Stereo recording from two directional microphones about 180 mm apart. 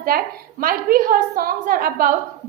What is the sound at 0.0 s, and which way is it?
A woman's voice, 55° right (ahead or behind).